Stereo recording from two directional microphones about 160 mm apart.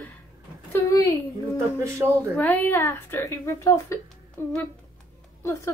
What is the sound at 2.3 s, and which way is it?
A woman's voice, 10° left (ahead or behind).